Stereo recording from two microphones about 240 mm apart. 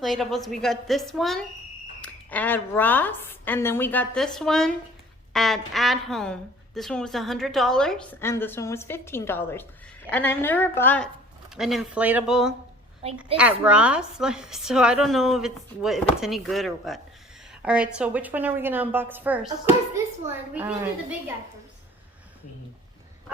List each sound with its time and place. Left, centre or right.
0.0 s a woman's voice: centre
13.0 s a woman's voice: right
13.7 s a woman's voice: centre